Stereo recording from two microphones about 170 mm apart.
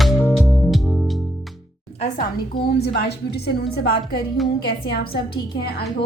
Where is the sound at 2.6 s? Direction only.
70° left (ahead or behind).